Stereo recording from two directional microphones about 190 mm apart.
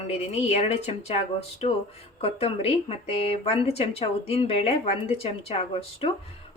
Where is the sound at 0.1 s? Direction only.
35° left (ahead or behind).